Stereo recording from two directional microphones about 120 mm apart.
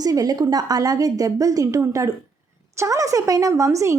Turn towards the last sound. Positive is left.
turn(degrees=-25)  # may be behind; listen again after turning